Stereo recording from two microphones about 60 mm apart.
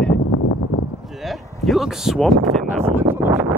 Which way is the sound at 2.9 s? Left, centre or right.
Right.